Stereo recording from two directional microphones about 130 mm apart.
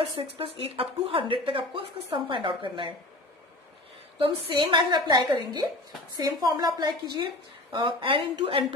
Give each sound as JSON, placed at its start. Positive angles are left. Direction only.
{"t": 0.1, "sound": "speech", "side_deg": -45}
{"t": 4.2, "sound": "speech", "side_deg": -40}